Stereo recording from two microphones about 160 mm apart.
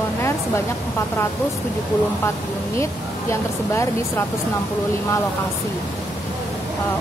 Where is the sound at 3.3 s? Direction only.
15° left (ahead or behind).